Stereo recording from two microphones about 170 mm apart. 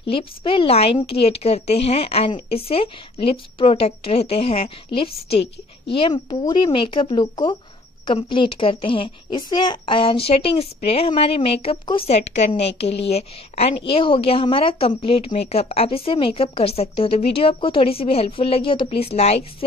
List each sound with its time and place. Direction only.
0.1 s a woman's voice: 30° left (ahead or behind)